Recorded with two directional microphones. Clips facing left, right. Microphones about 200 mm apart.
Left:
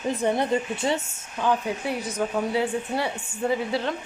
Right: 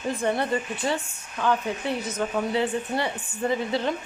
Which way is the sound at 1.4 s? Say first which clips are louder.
Even; 10° left (ahead or behind).